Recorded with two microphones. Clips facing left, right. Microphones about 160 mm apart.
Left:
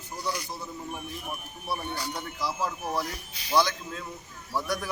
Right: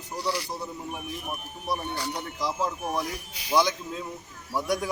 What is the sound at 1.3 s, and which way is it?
Speech, 15° right (ahead or behind).